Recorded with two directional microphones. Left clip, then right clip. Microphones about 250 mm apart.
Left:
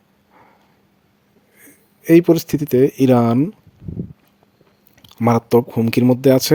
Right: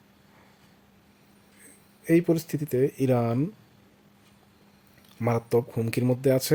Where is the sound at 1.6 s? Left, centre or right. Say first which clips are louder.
Left 11 dB; left.